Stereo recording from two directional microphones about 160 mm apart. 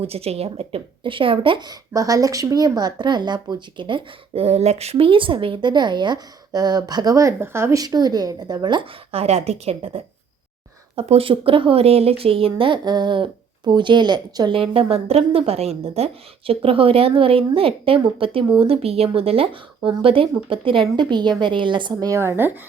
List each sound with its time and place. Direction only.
0.0 s a woman's voice: 40° right (ahead or behind); by 22.5 s 15° right (ahead or behind)